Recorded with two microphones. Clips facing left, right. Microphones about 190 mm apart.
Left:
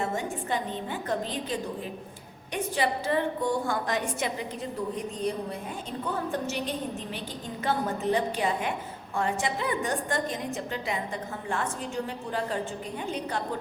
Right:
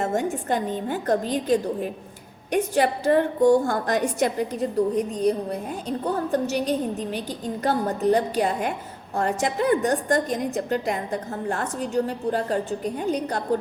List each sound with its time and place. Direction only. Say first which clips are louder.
0.0 s a woman's voice: right 6 dB; 45° right (ahead or behind)
6.1 s a woman's voice: right 7 dB; 40° right (ahead or behind)